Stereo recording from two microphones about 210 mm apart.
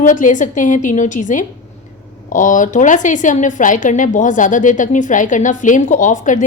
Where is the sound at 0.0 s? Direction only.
35° left (ahead or behind).